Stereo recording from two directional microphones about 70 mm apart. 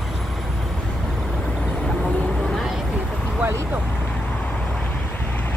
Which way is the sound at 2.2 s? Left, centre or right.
Centre.